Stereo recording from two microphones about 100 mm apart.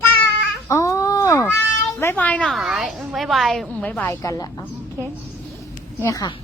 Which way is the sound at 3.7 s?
15° left (ahead or behind).